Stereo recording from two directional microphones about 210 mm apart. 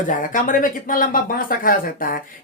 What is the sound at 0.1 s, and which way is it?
Speech, 40° left (ahead or behind).